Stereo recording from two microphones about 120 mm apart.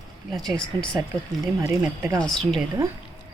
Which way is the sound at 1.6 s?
15° right (ahead or behind).